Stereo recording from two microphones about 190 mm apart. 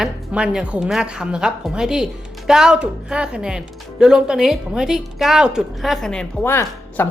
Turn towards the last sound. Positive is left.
turn(degrees=10)  # may be behind; listen again after turning